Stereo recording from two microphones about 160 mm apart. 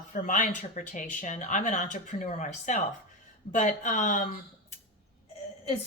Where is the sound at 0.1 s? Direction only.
50° left (ahead or behind).